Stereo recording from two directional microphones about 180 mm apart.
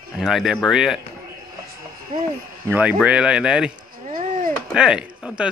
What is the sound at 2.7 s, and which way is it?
Speech, 10° right (ahead or behind).